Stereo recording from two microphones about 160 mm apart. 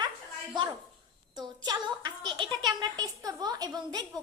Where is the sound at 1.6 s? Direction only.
25° right (ahead or behind).